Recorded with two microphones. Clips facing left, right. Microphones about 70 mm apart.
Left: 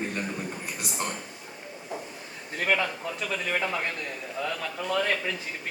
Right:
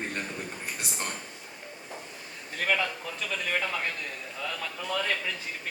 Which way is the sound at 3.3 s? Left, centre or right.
Centre.